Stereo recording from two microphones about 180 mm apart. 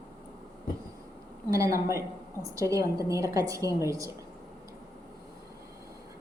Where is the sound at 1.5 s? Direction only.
15° right (ahead or behind).